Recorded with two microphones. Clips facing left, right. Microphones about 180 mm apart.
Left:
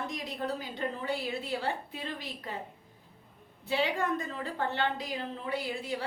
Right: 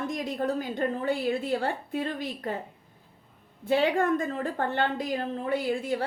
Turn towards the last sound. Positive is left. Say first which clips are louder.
# right 7 dB
turn(degrees=-50)  # may be behind; listen again after turning